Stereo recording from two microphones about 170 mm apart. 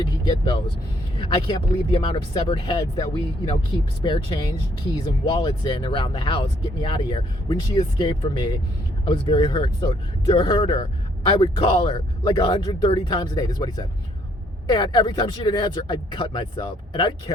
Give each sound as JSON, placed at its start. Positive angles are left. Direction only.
{"t": 0.3, "sound": "speech", "side_deg": 25}